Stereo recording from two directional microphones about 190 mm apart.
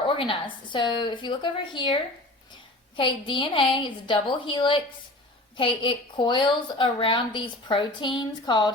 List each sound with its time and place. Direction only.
0.1 s a woman's voice: 25° left (ahead or behind)